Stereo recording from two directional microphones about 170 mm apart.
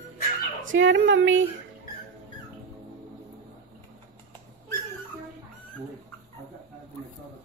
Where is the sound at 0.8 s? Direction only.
90° right.